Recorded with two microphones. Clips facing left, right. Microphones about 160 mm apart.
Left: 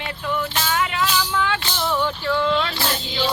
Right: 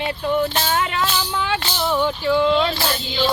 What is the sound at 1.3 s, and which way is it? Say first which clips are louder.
Music: even; 20° right (ahead or behind).